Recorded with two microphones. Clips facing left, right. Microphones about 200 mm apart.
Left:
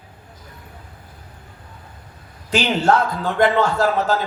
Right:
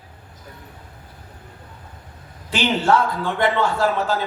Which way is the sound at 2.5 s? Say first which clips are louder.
Left 1 dB; 40° left (ahead or behind).